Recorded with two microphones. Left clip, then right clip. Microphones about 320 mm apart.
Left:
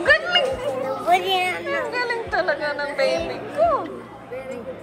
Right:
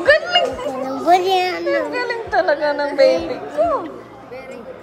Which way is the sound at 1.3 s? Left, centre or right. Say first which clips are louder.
Right 4 dB; right.